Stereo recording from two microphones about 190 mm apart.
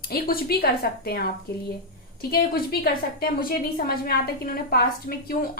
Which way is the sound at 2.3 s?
50° left (ahead or behind).